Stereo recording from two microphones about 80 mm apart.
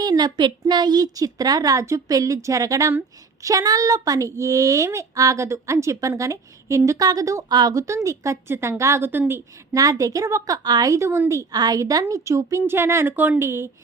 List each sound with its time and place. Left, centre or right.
0.0 s a woman's voice: right
9.7 s a woman's voice: right
12.6 s a woman's voice: right